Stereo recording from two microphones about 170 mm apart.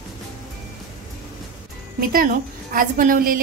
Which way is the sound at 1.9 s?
55° right (ahead or behind).